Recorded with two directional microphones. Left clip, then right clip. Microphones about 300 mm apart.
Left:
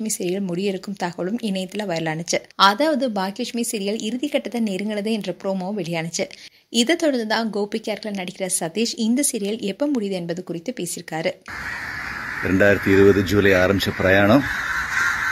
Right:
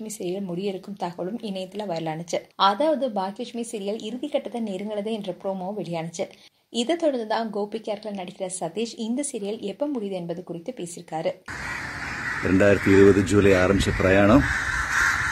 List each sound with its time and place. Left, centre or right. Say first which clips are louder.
0.0 s speech: left 5 dB; left
0.7 s speech: left 4 dB; left
1.4 s speech: left 4 dB; left
12.4 s speech: left 2 dB; centre